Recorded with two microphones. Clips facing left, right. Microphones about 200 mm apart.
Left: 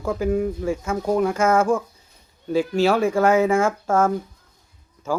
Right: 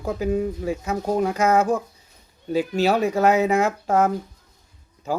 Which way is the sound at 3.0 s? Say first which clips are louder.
Left 1 dB; 20° right (ahead or behind).